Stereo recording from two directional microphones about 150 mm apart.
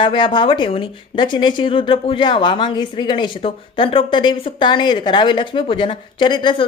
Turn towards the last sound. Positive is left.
turn(degrees=30)  # may be behind; listen again after turning